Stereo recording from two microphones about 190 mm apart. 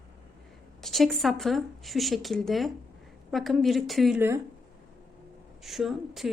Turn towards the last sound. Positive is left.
turn(degrees=0)  # may be behind; listen again after turning